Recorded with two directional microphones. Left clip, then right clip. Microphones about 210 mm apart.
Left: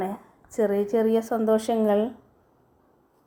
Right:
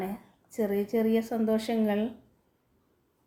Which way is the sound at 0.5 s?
55° left (ahead or behind).